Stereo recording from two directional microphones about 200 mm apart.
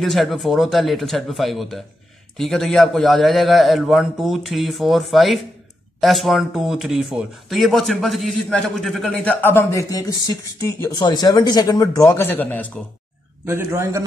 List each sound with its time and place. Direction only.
0.0 s speech: centre (ahead or behind)
13.5 s a man's voice: 15° right (ahead or behind)